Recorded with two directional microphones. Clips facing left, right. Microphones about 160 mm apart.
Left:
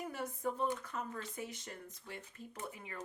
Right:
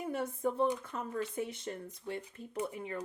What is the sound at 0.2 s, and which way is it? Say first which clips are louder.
Speech: right 6 dB; 25° right (ahead or behind).